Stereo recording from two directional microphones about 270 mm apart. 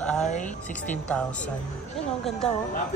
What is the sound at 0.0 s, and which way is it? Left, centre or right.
Music, centre.